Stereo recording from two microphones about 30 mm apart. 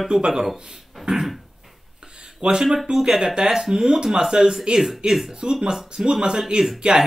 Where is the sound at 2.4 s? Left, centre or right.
Right.